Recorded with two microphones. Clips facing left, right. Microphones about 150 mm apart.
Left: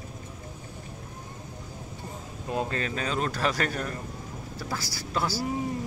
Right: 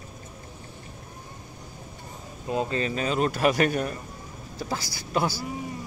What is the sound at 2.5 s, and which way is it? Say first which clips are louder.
Speech: right 3 dB; 5° right (ahead or behind).